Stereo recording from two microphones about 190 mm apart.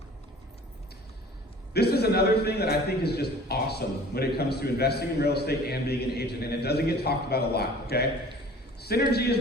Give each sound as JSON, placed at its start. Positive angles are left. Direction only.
{"t": 1.7, "sound": "a man's voice", "side_deg": 60}